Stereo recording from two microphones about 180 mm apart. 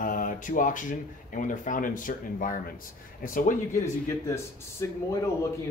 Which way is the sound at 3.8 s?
15° left (ahead or behind).